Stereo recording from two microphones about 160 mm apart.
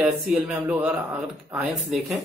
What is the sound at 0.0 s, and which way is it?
Speech, 10° right (ahead or behind).